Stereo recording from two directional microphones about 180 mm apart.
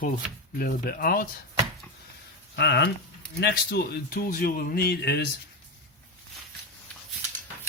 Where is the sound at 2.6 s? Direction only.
70° left (ahead or behind).